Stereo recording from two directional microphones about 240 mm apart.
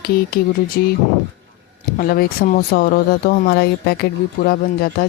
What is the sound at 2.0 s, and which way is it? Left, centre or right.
Speech, left.